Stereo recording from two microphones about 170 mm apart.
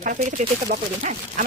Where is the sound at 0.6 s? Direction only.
50° right (ahead or behind).